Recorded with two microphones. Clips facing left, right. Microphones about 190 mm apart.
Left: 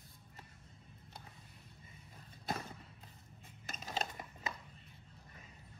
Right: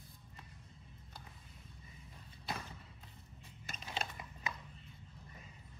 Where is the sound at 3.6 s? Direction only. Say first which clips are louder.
Left 2 dB; 40° left (ahead or behind).